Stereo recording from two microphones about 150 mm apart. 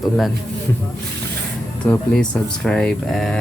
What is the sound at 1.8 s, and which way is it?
Speech, 10° left (ahead or behind).